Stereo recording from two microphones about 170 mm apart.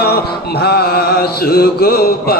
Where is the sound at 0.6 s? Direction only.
70° left (ahead or behind).